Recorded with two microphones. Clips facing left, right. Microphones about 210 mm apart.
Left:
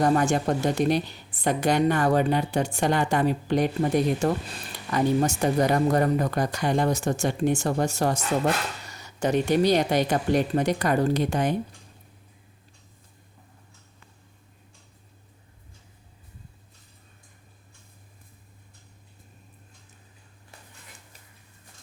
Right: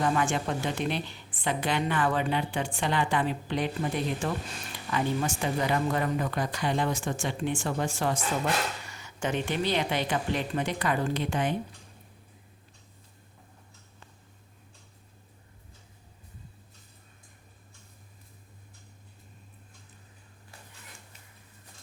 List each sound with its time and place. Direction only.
0.0 s a woman's voice: 40° left (ahead or behind)